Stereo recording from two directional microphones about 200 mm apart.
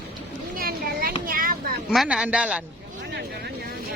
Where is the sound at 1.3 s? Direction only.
45° right (ahead or behind).